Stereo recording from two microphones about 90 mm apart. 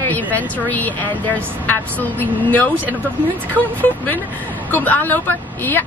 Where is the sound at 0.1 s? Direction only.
20° left (ahead or behind).